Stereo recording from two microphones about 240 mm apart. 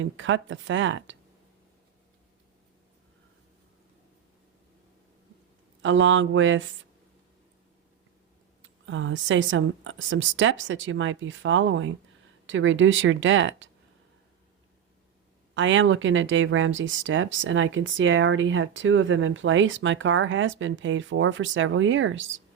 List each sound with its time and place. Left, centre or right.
0.0 s speech: right
5.8 s speech: right
8.6 s speech: right
15.5 s speech: right